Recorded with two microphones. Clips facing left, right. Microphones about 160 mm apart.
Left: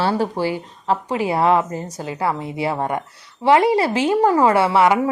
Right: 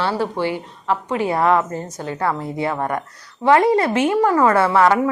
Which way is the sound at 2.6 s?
30° left (ahead or behind).